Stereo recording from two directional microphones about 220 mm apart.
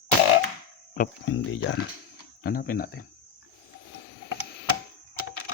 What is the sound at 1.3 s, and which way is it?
Speech, 60° left (ahead or behind).